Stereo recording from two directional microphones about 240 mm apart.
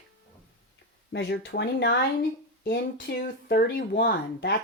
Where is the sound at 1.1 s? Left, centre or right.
Left.